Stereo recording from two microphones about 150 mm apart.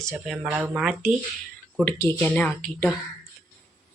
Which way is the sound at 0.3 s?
5° right (ahead or behind).